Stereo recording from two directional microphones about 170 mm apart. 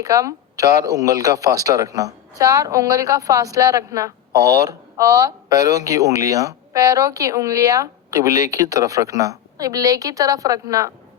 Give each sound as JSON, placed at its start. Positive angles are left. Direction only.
{"t": 0.0, "sound": "speech", "side_deg": -20}